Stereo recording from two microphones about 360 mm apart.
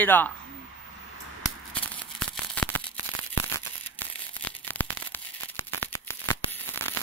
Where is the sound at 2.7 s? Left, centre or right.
Right.